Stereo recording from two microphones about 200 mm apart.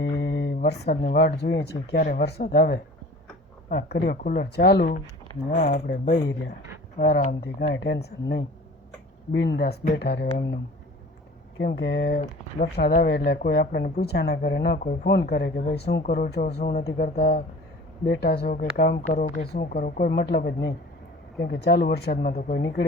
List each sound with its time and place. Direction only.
0.2 s a sound: 60° left (ahead or behind)
0.6 s speech: 50° left (ahead or behind)
1.9 s speech: 45° left (ahead or behind)
11.5 s speech: 55° left (ahead or behind)
12.2 s speech: 35° left (ahead or behind)
12.7 s speech: 50° left (ahead or behind)